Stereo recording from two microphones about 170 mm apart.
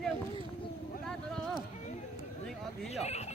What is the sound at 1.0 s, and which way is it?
Vehicle, 5° left (ahead or behind).